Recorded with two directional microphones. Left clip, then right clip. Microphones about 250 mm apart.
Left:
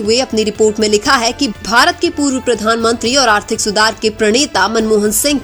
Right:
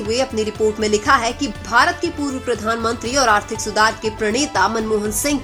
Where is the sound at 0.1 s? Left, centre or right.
Left.